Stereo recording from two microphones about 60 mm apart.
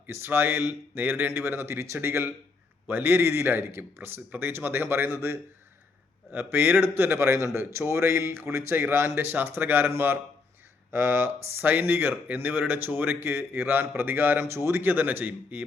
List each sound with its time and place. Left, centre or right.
0.1 s speech: right
6.3 s speech: right
7.2 s a man's voice: right
8.7 s speech: right
10.9 s speech: right